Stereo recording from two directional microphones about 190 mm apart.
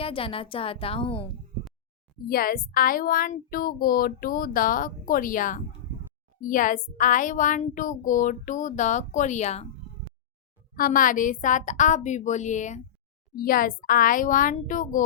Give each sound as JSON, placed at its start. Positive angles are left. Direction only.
{"t": 0.0, "sound": "a woman's voice", "side_deg": 30}
{"t": 2.1, "sound": "a child's voice", "side_deg": 50}
{"t": 10.8, "sound": "a child's voice", "side_deg": 45}